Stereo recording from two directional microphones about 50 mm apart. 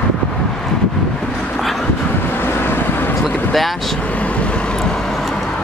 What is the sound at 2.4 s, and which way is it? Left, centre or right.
Vehicle, left.